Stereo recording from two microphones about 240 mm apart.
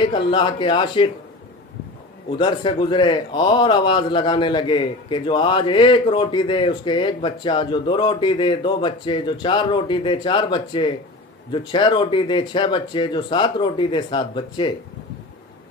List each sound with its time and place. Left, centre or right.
0.0 s speech: centre
2.3 s speech: centre